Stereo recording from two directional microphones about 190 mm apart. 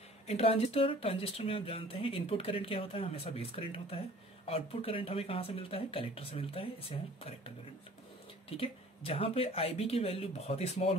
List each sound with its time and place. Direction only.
0.3 s speech: 35° left (ahead or behind)